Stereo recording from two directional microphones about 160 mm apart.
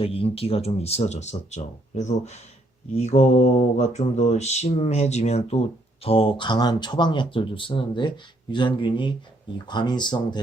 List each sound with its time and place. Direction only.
0.0 s mantra: 35° left (ahead or behind)
9.6 s speech: 30° left (ahead or behind)